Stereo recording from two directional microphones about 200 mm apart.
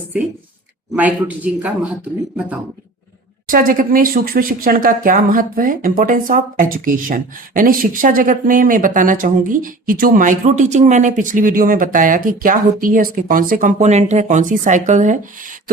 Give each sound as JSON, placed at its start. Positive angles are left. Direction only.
{"t": 0.9, "sound": "a man's voice", "side_deg": -10}
{"t": 3.4, "sound": "speech", "side_deg": -45}